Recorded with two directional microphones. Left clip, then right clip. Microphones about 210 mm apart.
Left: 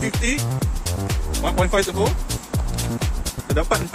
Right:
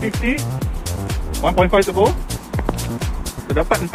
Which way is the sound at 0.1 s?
Centre (ahead or behind).